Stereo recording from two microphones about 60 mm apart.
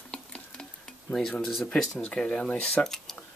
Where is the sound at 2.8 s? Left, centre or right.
Centre.